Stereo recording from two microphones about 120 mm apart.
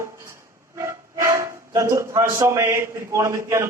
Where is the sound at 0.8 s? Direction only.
25° right (ahead or behind).